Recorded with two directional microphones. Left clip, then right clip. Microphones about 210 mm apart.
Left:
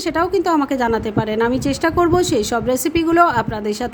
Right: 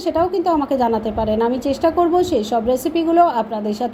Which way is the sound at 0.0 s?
25° left (ahead or behind).